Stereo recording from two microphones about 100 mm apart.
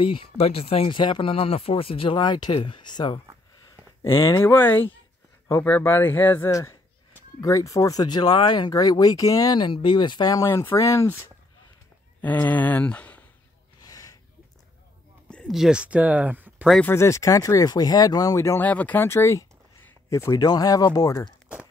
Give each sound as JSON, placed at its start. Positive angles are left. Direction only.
{"t": 0.0, "sound": "speech", "side_deg": 60}
{"t": 0.4, "sound": "speech", "side_deg": 75}
{"t": 4.4, "sound": "speech", "side_deg": 20}
{"t": 6.5, "sound": "speech", "side_deg": 30}
{"t": 12.2, "sound": "speech", "side_deg": 15}
{"t": 13.7, "sound": "gasp", "side_deg": 40}
{"t": 15.2, "sound": "a sound", "side_deg": 10}
{"t": 15.5, "sound": "speech", "side_deg": -5}
{"t": 16.8, "sound": "speech", "side_deg": 25}
{"t": 18.6, "sound": "speech", "side_deg": 15}
{"t": 19.0, "sound": "speech", "side_deg": 30}